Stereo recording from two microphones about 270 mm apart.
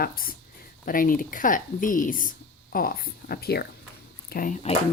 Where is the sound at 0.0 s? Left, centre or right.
Left.